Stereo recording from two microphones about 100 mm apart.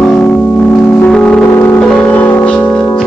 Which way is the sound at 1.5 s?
20° left (ahead or behind).